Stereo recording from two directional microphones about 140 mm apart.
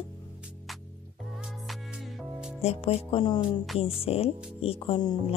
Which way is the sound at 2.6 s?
45° left (ahead or behind).